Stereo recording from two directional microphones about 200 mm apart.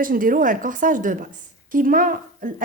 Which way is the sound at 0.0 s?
45° right (ahead or behind).